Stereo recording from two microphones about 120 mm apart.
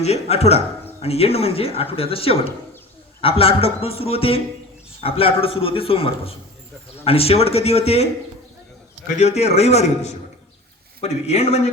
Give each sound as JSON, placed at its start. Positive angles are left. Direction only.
{"t": 0.0, "sound": "a woman's voice", "side_deg": 60}
{"t": 9.1, "sound": "speech", "side_deg": 65}